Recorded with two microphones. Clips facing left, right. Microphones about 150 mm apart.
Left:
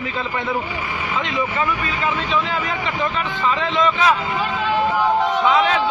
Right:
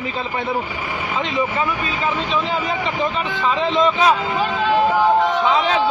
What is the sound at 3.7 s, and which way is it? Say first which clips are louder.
Speech: right 2 dB; 30° right (ahead or behind).